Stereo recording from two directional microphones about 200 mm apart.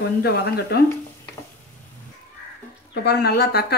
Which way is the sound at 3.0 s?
55° left (ahead or behind).